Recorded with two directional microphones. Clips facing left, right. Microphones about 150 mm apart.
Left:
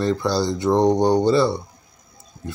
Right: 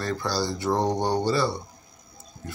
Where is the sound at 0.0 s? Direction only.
25° left (ahead or behind).